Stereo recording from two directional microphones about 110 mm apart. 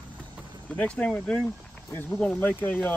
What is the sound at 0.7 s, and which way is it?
Speech, 10° left (ahead or behind).